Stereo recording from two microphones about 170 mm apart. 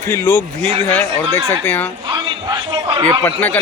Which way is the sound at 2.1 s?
25° right (ahead or behind).